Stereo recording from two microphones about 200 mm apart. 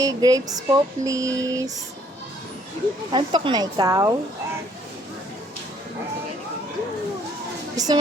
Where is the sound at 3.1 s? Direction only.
25° right (ahead or behind).